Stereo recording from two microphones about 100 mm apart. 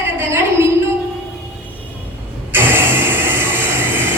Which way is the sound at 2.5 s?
20° right (ahead or behind).